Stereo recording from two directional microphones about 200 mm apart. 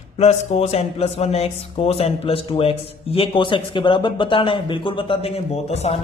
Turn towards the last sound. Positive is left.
turn(degrees=30)  # may be behind; listen again after turning